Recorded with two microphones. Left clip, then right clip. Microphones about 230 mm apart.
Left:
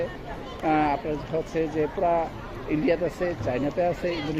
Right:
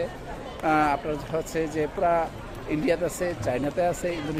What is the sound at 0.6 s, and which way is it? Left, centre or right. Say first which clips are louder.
Speech: right 1 dB; centre.